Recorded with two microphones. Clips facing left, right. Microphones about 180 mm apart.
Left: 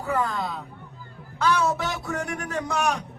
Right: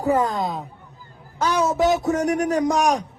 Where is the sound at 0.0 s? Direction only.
40° right (ahead or behind).